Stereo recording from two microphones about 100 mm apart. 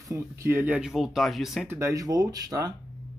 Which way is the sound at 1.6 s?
30° right (ahead or behind).